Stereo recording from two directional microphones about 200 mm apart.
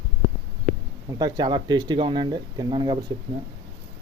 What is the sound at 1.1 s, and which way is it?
Speech, 20° right (ahead or behind).